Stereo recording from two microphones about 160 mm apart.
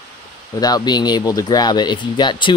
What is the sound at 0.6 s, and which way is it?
Speech, 25° left (ahead or behind).